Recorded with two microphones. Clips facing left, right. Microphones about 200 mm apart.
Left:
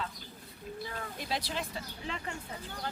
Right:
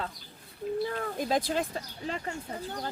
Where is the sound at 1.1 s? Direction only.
45° right (ahead or behind).